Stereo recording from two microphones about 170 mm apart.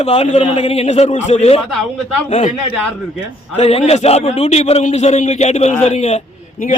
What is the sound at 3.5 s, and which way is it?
A man's voice, 35° left (ahead or behind).